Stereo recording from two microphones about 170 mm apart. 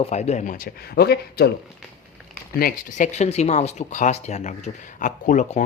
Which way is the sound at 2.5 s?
60° left (ahead or behind).